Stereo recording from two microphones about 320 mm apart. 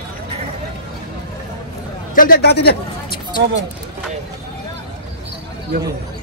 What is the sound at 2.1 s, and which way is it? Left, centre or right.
Speech, left.